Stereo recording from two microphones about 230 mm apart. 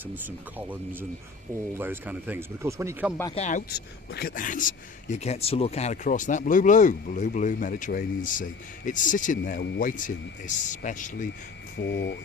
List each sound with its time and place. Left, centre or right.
1.8 s speech: centre
3.3 s speech: left
4.1 s speech: left
11.8 s speech: left